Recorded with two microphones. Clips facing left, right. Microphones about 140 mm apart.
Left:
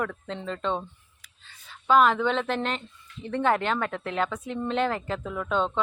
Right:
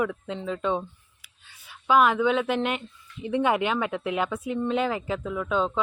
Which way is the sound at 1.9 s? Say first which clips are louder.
Even; 5° right (ahead or behind).